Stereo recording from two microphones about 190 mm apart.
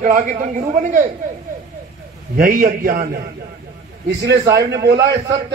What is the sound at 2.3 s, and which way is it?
Speech, 50° right (ahead or behind).